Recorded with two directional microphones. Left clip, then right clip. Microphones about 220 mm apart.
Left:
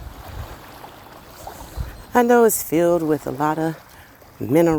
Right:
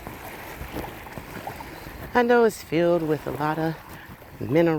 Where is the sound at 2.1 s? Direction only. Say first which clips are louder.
Left 4 dB; 55° left (ahead or behind).